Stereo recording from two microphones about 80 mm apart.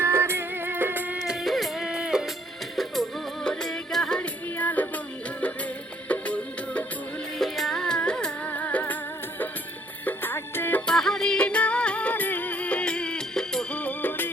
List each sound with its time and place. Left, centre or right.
0.0 s music: right
1.3 s music: centre
4.2 s music: left
6.1 s music: centre
7.3 s music: centre
10.1 s music: left
10.8 s music: centre; by 14.3 s left